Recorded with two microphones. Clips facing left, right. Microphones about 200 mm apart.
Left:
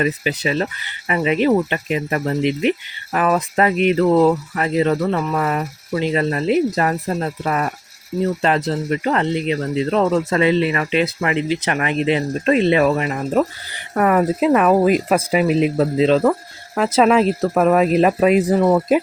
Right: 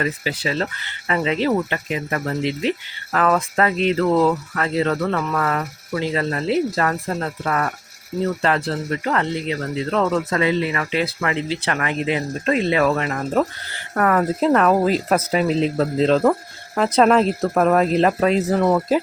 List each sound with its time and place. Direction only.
0.0 s speech: 20° left (ahead or behind)
16.0 s speech: centre (ahead or behind)